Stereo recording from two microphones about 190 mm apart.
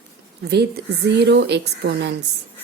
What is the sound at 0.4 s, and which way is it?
A woman's voice, 60° right (ahead or behind).